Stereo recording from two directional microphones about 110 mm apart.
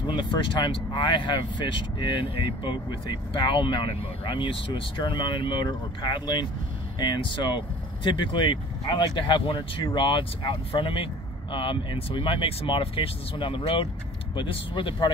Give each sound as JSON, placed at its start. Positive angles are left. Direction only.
{"t": 0.0, "sound": "speech", "side_deg": 45}